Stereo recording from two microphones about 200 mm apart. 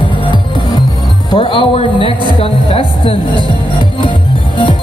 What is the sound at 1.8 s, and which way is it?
Speech, 25° right (ahead or behind).